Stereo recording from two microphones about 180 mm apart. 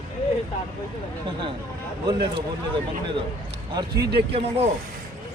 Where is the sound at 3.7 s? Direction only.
25° right (ahead or behind).